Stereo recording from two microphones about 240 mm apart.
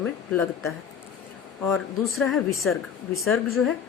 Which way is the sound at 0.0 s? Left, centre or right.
Centre.